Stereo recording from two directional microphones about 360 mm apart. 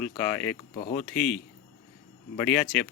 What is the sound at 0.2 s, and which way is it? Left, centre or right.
Speech, centre.